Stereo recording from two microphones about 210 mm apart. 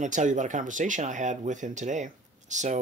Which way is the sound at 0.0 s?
35° right (ahead or behind).